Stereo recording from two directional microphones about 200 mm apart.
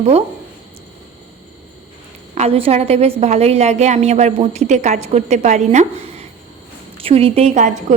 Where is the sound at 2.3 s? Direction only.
30° right (ahead or behind).